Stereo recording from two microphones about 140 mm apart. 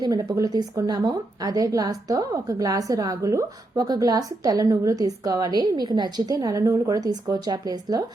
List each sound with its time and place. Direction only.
0.0 s a woman's voice: 30° right (ahead or behind)